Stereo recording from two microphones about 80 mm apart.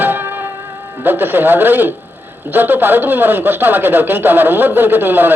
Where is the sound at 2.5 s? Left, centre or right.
Right.